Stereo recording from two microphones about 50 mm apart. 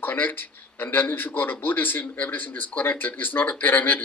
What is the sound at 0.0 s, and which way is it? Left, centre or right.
Speech, left.